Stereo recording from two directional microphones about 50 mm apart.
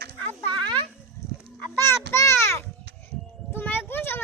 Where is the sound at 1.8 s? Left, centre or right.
Left.